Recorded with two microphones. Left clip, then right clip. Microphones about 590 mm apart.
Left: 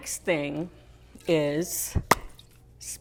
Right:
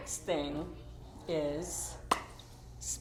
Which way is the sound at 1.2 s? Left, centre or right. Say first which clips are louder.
Left 10 dB; left.